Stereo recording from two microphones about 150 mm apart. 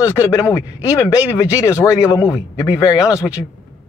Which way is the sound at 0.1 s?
20° left (ahead or behind).